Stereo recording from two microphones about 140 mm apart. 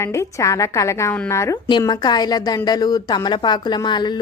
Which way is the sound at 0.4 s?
25° left (ahead or behind).